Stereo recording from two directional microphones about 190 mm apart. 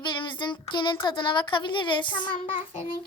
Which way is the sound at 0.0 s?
25° left (ahead or behind).